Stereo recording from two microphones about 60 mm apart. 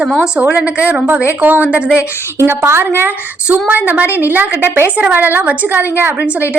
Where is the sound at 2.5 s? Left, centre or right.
Right.